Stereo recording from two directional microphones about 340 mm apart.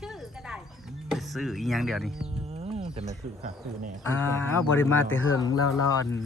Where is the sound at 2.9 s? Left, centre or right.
Centre.